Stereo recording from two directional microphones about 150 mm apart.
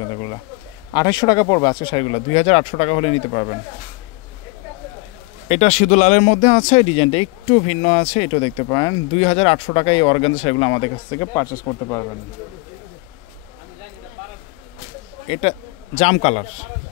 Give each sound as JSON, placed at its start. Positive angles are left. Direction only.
{"t": 0.1, "sound": "a sound", "side_deg": 25}
{"t": 0.9, "sound": "speech", "side_deg": 25}
{"t": 5.5, "sound": "speech", "side_deg": 50}
{"t": 9.2, "sound": "speech", "side_deg": 40}
{"t": 10.3, "sound": "speech", "side_deg": 45}
{"t": 15.2, "sound": "a man's voice", "side_deg": 40}